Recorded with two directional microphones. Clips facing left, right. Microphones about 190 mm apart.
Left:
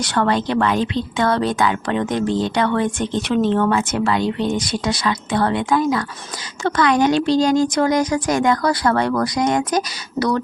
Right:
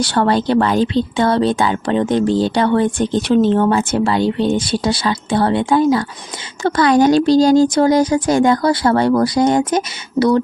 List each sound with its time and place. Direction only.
0.0 s speech: 30° right (ahead or behind)